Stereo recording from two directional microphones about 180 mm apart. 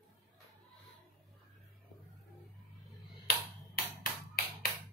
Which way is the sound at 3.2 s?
55° left (ahead or behind).